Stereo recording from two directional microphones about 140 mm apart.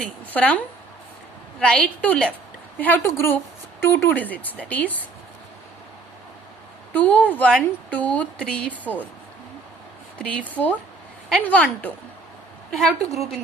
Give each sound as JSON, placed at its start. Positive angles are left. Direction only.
{"t": 0.0, "sound": "speech", "side_deg": 10}
{"t": 6.9, "sound": "speech", "side_deg": 10}
{"t": 10.2, "sound": "speech", "side_deg": 10}
{"t": 13.0, "sound": "a woman's voice", "side_deg": 50}